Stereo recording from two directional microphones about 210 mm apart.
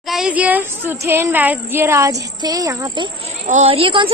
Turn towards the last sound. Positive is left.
turn(degrees=-25)  # may be behind; listen again after turning